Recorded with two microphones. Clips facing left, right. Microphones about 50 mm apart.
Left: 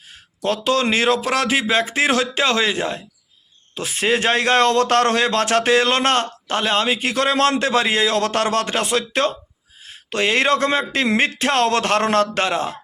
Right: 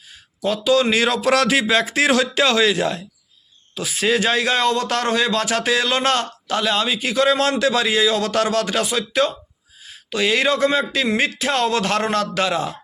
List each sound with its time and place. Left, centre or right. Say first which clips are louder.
0.1 s speech: even; left
1.2 s a man's voice: right 3 dB; centre
3.8 s a man's voice: even; left